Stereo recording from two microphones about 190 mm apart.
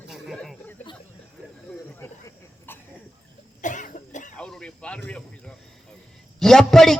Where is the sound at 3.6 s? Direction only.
40° left (ahead or behind).